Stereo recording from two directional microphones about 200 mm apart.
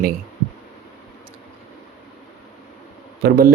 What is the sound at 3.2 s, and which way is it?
Speech, 45° right (ahead or behind).